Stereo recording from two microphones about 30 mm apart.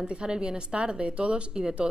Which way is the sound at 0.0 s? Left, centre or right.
Right.